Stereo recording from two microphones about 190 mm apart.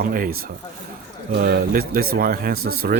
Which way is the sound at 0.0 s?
50° right (ahead or behind).